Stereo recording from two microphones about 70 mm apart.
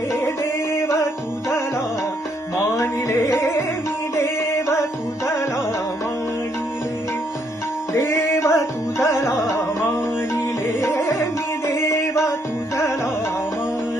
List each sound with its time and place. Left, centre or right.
0.1 s music: left
2.7 s music: left
7.9 s music: left